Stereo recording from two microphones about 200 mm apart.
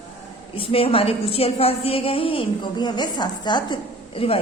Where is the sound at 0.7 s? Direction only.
30° left (ahead or behind).